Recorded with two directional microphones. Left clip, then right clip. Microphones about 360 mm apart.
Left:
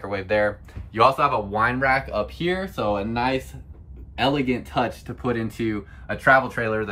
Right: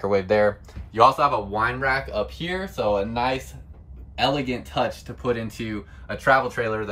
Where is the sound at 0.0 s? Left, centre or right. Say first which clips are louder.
Right 3 dB; centre.